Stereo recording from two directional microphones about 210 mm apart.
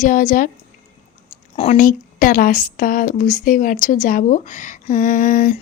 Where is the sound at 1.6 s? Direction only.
30° left (ahead or behind).